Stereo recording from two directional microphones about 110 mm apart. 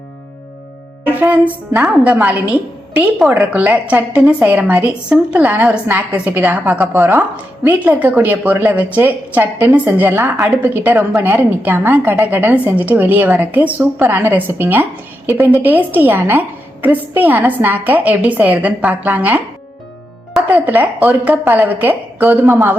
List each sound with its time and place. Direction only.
1.1 s music: 15° right (ahead or behind)
1.7 s a woman's voice: 10° right (ahead or behind)
6.9 s a woman's voice: 25° right (ahead or behind)
20.5 s a woman's voice: 15° right (ahead or behind)